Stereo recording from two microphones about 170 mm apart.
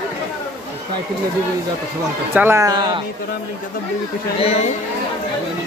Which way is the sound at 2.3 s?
15° right (ahead or behind).